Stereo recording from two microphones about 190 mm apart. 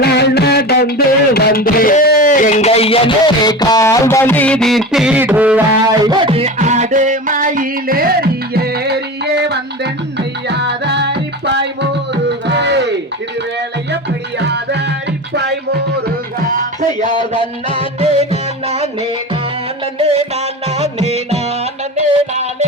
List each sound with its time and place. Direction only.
0.0 s music: 60° left (ahead or behind); by 5.9 s 10° right (ahead or behind)
6.1 s music: 30° right (ahead or behind); by 11.9 s 65° right (ahead or behind)
12.5 s a sound: 65° right (ahead or behind)
13.9 s music: 65° right (ahead or behind)
16.5 s music: 45° right (ahead or behind)
17.2 s music: 25° left (ahead or behind)
17.7 s music: 30° right (ahead or behind)
20.0 s music: 30° right (ahead or behind)